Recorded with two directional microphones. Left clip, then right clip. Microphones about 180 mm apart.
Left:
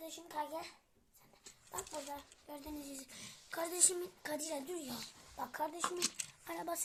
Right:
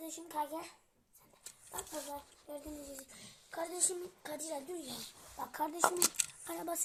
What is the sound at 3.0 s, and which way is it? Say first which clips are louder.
A child's voice: left 3 dB; 35° left (ahead or behind).